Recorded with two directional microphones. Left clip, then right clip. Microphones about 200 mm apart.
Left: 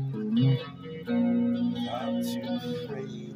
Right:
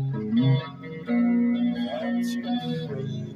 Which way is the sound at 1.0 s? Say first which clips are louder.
Right 3 dB; 15° right (ahead or behind).